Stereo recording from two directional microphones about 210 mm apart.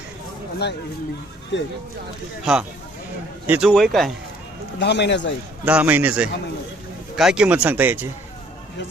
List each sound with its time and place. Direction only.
1.5 s speech: 60° left (ahead or behind)
2.4 s a man's voice: 5° right (ahead or behind)
4.8 s speech: 55° left (ahead or behind)
5.6 s speech: 10° right (ahead or behind)